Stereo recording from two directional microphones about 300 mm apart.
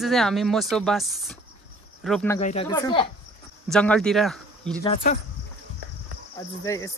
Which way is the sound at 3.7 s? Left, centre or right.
Centre.